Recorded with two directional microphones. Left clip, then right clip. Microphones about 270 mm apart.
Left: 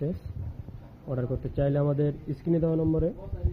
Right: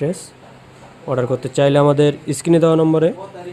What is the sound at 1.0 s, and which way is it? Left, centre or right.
Speech, right.